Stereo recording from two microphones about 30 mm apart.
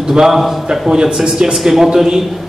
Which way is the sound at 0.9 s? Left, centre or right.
Right.